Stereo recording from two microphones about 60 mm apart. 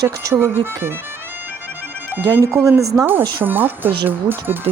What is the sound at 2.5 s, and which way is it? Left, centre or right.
Speech, right.